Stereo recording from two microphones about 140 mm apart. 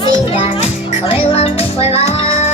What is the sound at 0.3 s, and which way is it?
Music, 45° left (ahead or behind).